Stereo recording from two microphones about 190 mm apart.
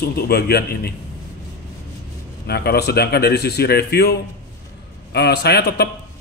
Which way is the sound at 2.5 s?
55° left (ahead or behind).